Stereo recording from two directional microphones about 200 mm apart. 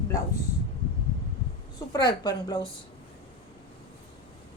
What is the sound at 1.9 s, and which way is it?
Speech, 20° left (ahead or behind).